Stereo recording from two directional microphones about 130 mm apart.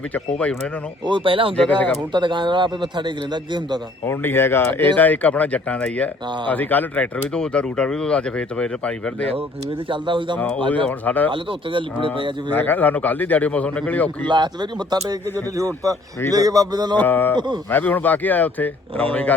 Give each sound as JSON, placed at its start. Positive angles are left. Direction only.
{"t": 1.0, "sound": "speech", "side_deg": -40}
{"t": 1.5, "sound": "speech", "side_deg": 10}
{"t": 2.1, "sound": "speech", "side_deg": -35}
{"t": 4.0, "sound": "speech", "side_deg": 20}
{"t": 9.9, "sound": "speech", "side_deg": -40}
{"t": 10.3, "sound": "speech", "side_deg": 10}
{"t": 11.3, "sound": "speech", "side_deg": -40}
{"t": 12.5, "sound": "speech", "side_deg": 15}
{"t": 14.3, "sound": "speech", "side_deg": -35}
{"t": 17.0, "sound": "speech", "side_deg": 15}